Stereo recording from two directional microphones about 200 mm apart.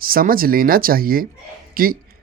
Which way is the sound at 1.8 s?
45° right (ahead or behind).